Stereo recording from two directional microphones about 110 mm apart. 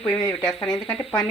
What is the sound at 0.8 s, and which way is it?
Speech, 55° left (ahead or behind).